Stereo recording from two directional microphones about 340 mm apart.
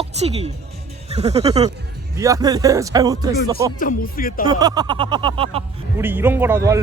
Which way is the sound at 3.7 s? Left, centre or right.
Left.